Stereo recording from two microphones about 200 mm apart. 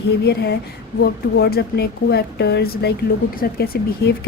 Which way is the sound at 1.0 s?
50° left (ahead or behind).